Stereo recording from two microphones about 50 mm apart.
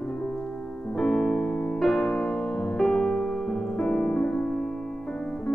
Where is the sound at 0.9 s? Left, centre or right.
Centre.